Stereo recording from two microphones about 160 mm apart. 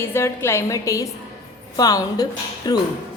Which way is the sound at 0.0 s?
15° left (ahead or behind).